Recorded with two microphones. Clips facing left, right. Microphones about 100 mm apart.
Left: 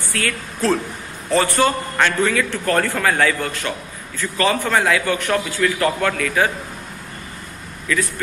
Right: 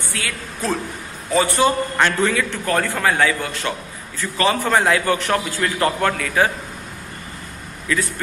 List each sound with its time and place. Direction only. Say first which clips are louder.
0.1 s a man's voice: left 6 dB; 15° right (ahead or behind)